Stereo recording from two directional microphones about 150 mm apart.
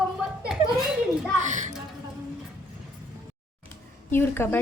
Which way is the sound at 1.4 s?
55° right (ahead or behind).